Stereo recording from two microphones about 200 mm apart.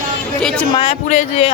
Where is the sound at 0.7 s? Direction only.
25° left (ahead or behind).